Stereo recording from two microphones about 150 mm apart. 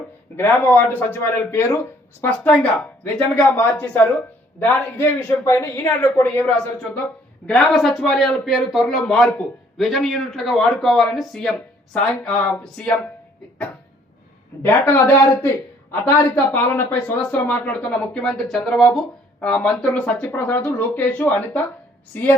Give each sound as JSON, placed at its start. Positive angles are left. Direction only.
{"t": 0.3, "sound": "a man's voice", "side_deg": 15}
{"t": 14.6, "sound": "speech", "side_deg": 15}